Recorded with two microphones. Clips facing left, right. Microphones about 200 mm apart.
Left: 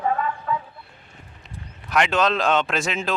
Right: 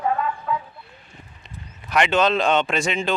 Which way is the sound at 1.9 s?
Centre (ahead or behind).